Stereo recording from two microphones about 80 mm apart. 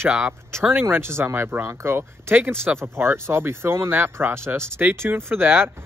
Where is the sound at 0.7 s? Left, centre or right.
Right.